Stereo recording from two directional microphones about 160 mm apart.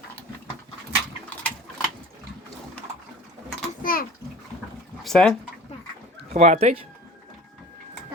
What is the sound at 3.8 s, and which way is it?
Bathtub, 60° left (ahead or behind).